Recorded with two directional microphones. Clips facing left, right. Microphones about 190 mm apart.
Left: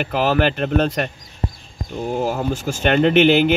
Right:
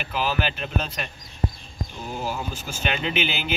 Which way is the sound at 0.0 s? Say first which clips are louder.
Left 8 dB; 75° left (ahead or behind).